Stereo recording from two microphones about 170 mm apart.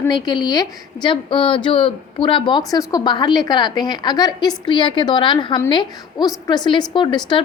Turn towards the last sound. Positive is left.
turn(degrees=25)  # may be behind; listen again after turning